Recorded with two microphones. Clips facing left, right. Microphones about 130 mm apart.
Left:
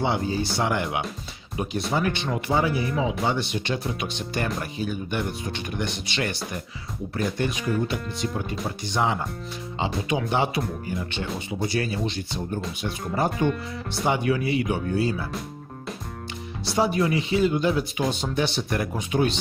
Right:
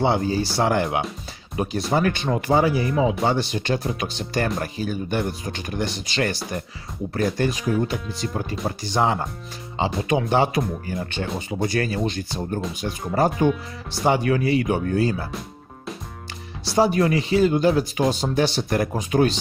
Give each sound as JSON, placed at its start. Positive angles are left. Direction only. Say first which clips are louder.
{"t": 0.0, "sound": "speech", "louder": "right 4 dB", "side_deg": -35}
{"t": 2.8, "sound": "speech", "louder": "right 4 dB", "side_deg": 0}
{"t": 3.2, "sound": "speech", "louder": "right 3 dB", "side_deg": -35}
{"t": 13.1, "sound": "speech", "louder": "right 4 dB", "side_deg": -40}
{"t": 16.7, "sound": "speech", "louder": "right 4 dB", "side_deg": -40}